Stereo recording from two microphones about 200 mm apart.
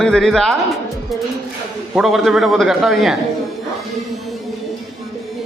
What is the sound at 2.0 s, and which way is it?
A man's voice, centre (ahead or behind).